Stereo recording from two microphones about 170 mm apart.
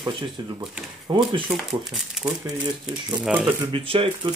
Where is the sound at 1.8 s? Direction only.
Centre (ahead or behind).